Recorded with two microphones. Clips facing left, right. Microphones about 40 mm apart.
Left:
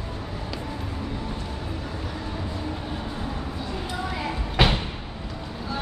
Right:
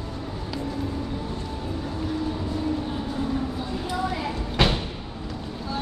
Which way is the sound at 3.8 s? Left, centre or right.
Centre.